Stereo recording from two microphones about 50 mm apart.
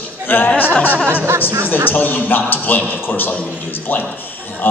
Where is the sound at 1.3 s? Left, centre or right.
Right.